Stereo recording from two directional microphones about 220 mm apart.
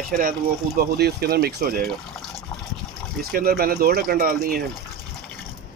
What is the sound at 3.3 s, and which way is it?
Speech, 45° right (ahead or behind).